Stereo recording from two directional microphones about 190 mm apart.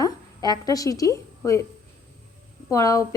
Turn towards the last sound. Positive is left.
turn(degrees=15)  # may be behind; listen again after turning